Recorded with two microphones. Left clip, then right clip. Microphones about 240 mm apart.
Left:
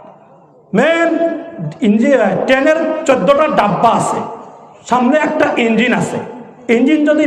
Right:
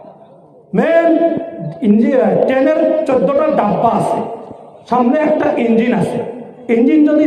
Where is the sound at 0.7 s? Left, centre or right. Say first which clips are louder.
Right 1 dB; left.